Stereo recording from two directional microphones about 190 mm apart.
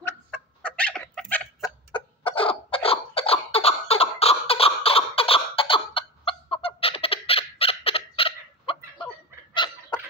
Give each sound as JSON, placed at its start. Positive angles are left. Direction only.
{"t": 0.0, "sound": "fowl", "side_deg": 5}
{"t": 1.6, "sound": "chicken", "side_deg": 25}
{"t": 9.5, "sound": "fowl", "side_deg": 25}